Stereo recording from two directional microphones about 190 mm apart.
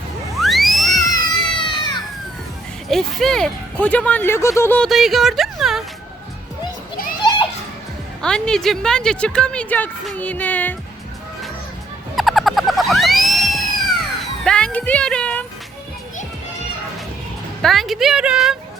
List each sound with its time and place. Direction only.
0.3 s music: centre (ahead or behind)
1.1 s music: 25° left (ahead or behind)
2.9 s speech: centre (ahead or behind)
4.9 s speech: centre (ahead or behind)
8.2 s a woman's voice: 5° left (ahead or behind)
12.1 s a sound: centre (ahead or behind)
17.6 s a woman's voice: centre (ahead or behind)